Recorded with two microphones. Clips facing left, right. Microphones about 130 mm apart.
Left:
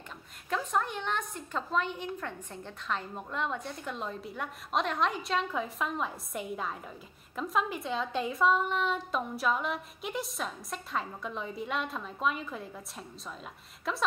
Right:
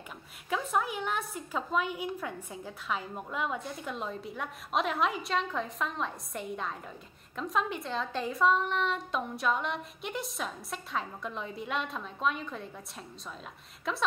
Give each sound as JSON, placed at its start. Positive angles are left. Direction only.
{"t": 0.5, "sound": "a woman's voice", "side_deg": -5}